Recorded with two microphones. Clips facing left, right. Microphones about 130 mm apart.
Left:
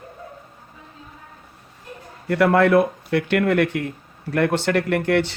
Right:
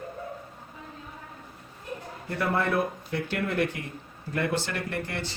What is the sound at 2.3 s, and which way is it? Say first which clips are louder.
Speech: left 11 dB; 75° left (ahead or behind).